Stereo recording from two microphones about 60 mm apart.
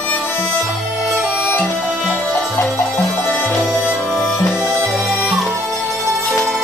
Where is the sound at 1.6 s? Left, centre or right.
Centre.